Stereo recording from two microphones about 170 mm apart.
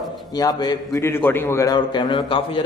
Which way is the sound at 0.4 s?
25° left (ahead or behind).